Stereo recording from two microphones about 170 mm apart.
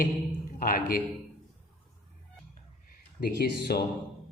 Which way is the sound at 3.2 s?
70° left (ahead or behind).